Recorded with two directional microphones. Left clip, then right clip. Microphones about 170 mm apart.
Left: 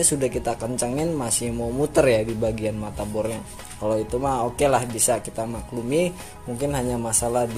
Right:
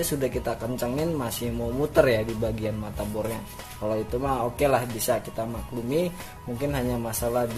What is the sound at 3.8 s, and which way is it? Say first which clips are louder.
A man's voice: left 4 dB; 30° left (ahead or behind).